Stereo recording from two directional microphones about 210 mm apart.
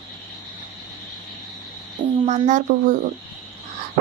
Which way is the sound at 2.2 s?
35° right (ahead or behind).